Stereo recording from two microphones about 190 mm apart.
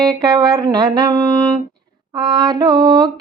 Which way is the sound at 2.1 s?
20° right (ahead or behind).